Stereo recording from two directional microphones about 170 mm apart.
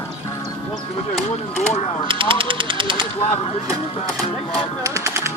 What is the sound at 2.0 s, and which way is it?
Speech, 30° right (ahead or behind).